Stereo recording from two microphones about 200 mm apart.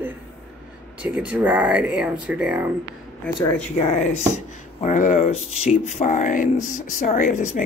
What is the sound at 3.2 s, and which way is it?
Speech, 5° left (ahead or behind).